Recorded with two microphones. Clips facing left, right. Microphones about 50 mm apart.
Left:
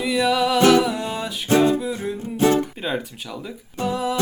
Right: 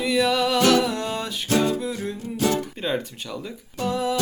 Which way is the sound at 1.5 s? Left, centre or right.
Left.